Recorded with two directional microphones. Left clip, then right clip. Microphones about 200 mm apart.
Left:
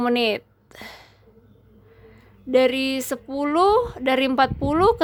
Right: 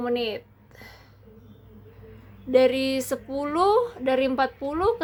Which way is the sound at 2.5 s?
25° left (ahead or behind).